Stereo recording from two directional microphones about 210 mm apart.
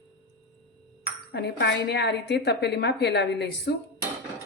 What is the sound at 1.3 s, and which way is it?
A woman's voice, 55° left (ahead or behind).